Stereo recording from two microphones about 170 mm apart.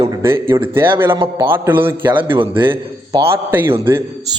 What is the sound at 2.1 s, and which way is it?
A man's voice, 30° right (ahead or behind).